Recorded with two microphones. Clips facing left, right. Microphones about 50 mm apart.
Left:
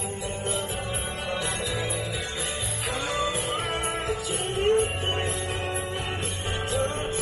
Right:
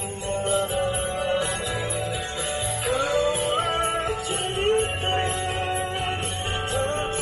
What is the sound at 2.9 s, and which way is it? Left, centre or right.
Music, right.